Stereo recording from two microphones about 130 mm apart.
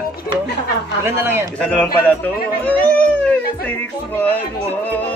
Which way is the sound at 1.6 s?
10° left (ahead or behind).